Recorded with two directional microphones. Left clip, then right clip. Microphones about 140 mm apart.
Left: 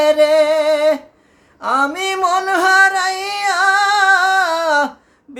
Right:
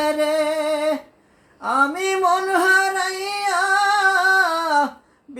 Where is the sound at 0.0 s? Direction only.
15° left (ahead or behind).